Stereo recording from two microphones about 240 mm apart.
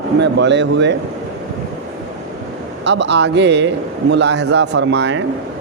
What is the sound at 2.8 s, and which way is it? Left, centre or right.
Speech, right.